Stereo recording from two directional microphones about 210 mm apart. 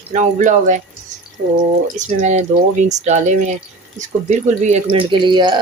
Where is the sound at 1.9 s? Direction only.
35° right (ahead or behind).